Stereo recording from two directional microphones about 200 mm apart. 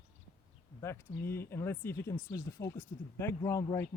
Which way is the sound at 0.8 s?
15° left (ahead or behind).